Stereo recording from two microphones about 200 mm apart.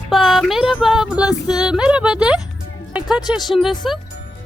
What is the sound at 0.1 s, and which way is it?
Music, centre (ahead or behind).